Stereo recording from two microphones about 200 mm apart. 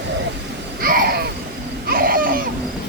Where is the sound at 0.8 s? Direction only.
45° right (ahead or behind).